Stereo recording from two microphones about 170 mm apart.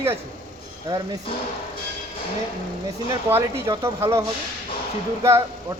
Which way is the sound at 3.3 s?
15° right (ahead or behind).